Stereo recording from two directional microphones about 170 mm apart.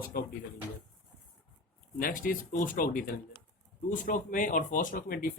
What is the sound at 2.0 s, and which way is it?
Speech, 55° left (ahead or behind).